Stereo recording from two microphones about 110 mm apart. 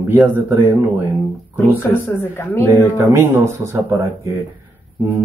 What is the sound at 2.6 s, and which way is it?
Speech, 25° right (ahead or behind).